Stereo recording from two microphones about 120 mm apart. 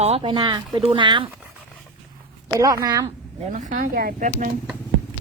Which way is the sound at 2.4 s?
30° right (ahead or behind).